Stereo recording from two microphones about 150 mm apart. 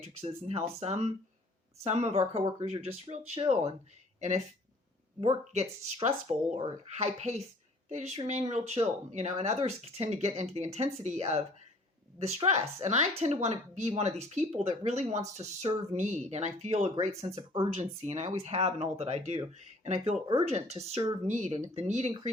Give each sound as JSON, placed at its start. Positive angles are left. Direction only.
{"t": 0.0, "sound": "speech", "side_deg": -45}
{"t": 6.0, "sound": "speech", "side_deg": -45}